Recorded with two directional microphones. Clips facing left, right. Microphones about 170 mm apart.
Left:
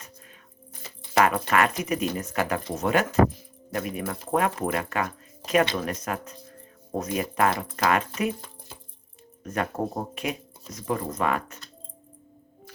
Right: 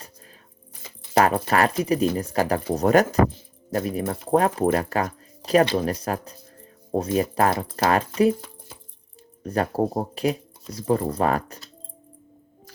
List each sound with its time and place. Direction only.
1.1 s speech: 35° right (ahead or behind)
9.4 s speech: 35° right (ahead or behind)